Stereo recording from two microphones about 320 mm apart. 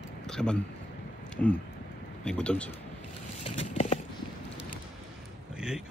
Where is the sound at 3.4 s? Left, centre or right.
Centre.